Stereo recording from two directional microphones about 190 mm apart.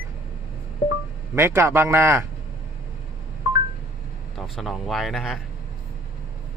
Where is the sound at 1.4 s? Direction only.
10° right (ahead or behind).